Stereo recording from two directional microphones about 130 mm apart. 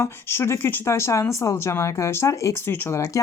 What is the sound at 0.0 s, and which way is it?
Speech, 20° left (ahead or behind).